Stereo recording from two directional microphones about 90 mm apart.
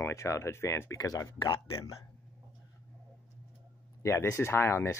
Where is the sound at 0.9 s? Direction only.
40° left (ahead or behind).